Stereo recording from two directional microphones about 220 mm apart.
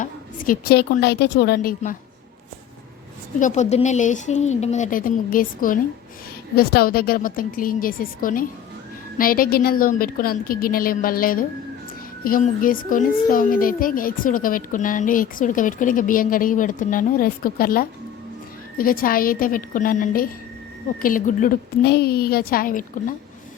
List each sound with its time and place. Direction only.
0.0 s a woman's voice: 40° left (ahead or behind)
3.4 s a child's voice: 30° left (ahead or behind)